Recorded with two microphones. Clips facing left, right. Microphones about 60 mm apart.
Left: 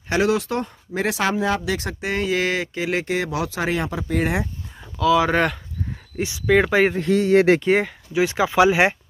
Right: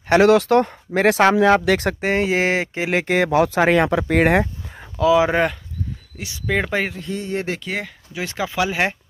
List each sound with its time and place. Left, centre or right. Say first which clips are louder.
0.1 s speech: right 7 dB; right
2.0 s a sound: right 3 dB; right
3.1 s speech: right 7 dB; right
4.4 s a sound: right 6 dB; right
5.0 s speech: right 2 dB; centre
6.4 s speech: left 4 dB; centre
7.1 s speech: left 10 dB; left
7.6 s speech: left 8 dB; left